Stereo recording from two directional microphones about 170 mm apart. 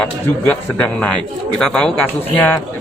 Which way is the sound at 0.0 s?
10° left (ahead or behind).